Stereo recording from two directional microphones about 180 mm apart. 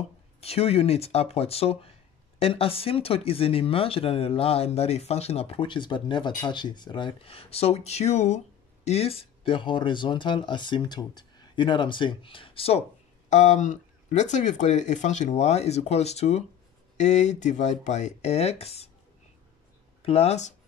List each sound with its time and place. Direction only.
0.4 s speech: 35° left (ahead or behind)
20.0 s speech: 35° left (ahead or behind)